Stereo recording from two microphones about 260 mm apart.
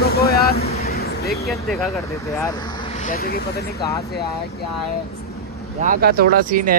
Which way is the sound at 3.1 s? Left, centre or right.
Left.